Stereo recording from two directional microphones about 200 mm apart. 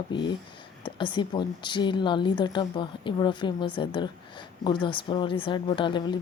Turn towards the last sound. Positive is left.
turn(degrees=25)  # may be behind; listen again after turning